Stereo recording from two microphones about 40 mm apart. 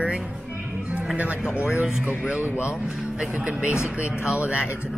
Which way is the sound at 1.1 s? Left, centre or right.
Right.